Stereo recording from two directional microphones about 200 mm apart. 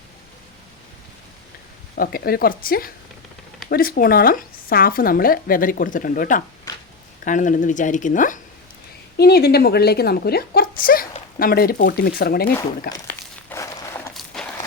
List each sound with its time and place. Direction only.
2.0 s a woman's voice: 50° left (ahead or behind)
9.1 s a woman's voice: 50° left (ahead or behind)
13.5 s a sound: 15° left (ahead or behind)
14.1 s walk: centre (ahead or behind)